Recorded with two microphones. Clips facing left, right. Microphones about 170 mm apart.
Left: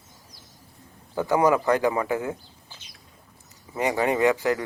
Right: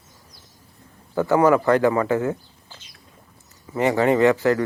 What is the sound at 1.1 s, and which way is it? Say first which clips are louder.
Speech: right 4 dB; 15° left (ahead or behind).